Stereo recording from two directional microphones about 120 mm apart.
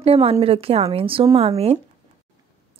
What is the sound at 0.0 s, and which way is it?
A woman's voice, 55° right (ahead or behind).